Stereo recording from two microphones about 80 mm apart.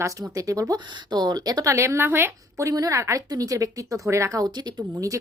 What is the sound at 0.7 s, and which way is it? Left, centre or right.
Speech, right.